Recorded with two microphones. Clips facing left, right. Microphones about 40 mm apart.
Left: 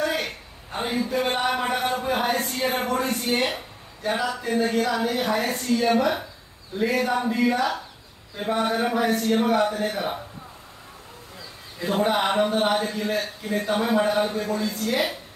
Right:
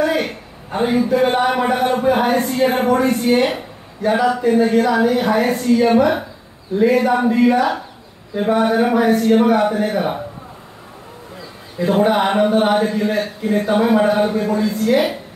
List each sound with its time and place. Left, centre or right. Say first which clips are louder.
0.0 s a sound: right 8 dB; right
0.9 s speech: right 9 dB; right
11.8 s speech: right 7 dB; right